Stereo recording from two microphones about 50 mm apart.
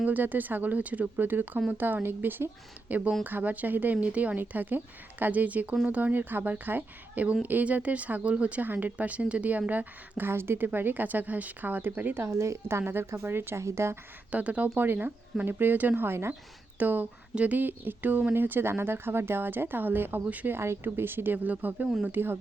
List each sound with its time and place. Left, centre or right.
0.0 s a woman's voice: right
2.9 s a woman's voice: right
8.6 s a woman's voice: right
10.2 s a woman's voice: right
12.2 s a woman's voice: right
12.6 s speech: right
13.6 s speech: right
14.3 s speech: right
14.8 s a woman's voice: right
20.2 s a woman's voice: right
20.5 s speech: right
21.3 s a woman's voice: right
22.1 s speech: right